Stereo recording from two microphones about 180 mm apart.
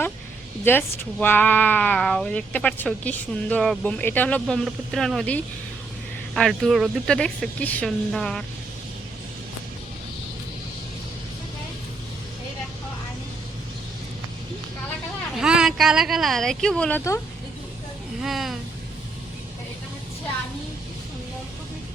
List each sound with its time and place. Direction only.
0.6 s speech: 10° left (ahead or behind)
15.4 s speech: 5° right (ahead or behind)
18.2 s speech: centre (ahead or behind)